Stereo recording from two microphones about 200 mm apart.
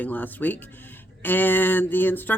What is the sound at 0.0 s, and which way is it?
Speech, 10° left (ahead or behind).